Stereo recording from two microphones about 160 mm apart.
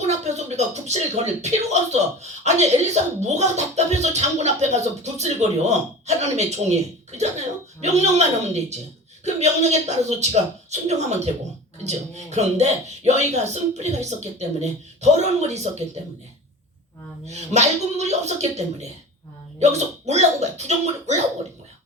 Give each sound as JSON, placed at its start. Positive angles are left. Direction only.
{"t": 0.0, "sound": "a sound", "side_deg": -45}
{"t": 1.4, "sound": "speech", "side_deg": -45}
{"t": 17.2, "sound": "speech", "side_deg": -45}